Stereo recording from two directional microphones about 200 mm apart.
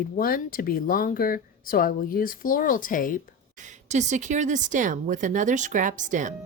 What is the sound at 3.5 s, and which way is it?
Speech, 40° right (ahead or behind).